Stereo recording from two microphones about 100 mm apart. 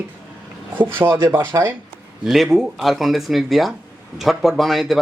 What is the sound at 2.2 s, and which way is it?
Speech, 5° right (ahead or behind).